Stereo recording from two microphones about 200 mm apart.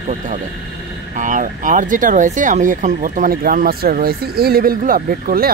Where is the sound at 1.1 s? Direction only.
40° right (ahead or behind).